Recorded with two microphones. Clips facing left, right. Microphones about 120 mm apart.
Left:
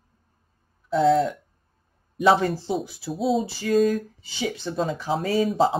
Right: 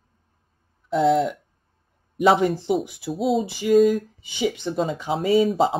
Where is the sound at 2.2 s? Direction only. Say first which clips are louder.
Right 1 dB; 20° right (ahead or behind).